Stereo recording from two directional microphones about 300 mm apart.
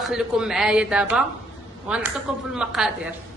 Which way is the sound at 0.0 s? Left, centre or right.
Centre.